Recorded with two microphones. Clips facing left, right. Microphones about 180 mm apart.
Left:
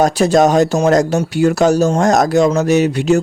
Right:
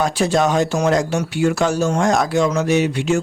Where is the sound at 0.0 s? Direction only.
40° left (ahead or behind).